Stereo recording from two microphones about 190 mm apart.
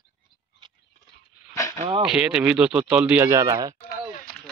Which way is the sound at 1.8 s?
25° right (ahead or behind).